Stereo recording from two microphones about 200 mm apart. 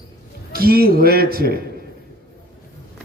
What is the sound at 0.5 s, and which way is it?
A man's voice, 50° right (ahead or behind).